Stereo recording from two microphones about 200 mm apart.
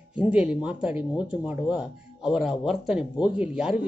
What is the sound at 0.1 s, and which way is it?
Speech, 5° right (ahead or behind).